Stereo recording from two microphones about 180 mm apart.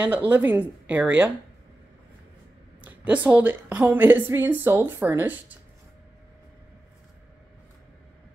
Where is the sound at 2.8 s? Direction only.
10° right (ahead or behind).